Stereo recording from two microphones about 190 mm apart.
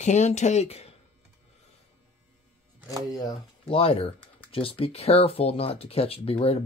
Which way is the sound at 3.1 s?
25° left (ahead or behind).